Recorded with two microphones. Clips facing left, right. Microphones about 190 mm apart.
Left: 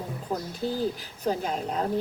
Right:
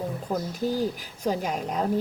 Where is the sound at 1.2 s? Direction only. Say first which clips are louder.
Right 1 dB; 10° right (ahead or behind).